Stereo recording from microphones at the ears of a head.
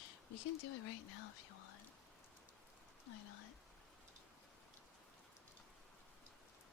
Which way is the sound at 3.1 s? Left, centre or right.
Left.